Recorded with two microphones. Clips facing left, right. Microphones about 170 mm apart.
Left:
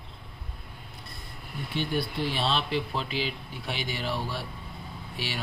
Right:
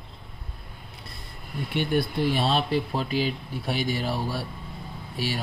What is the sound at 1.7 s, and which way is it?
Speech, 55° right (ahead or behind).